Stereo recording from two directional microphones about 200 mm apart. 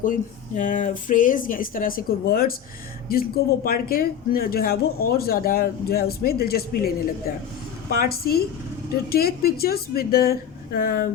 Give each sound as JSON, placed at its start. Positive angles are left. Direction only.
{"t": 0.0, "sound": "speech", "side_deg": 40}